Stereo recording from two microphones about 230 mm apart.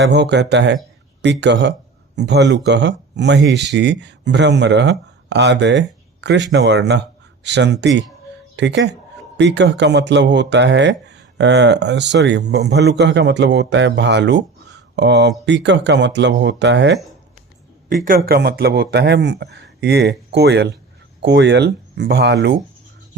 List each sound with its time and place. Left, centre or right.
0.0 s speech: right
18.0 s speech: right